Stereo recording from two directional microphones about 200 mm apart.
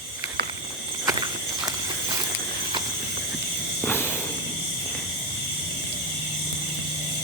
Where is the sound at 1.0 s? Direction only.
20° right (ahead or behind).